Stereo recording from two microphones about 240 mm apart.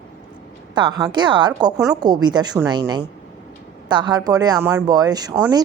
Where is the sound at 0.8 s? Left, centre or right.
Centre.